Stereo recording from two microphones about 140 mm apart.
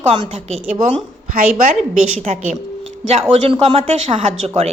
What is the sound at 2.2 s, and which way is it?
Speech, 55° right (ahead or behind).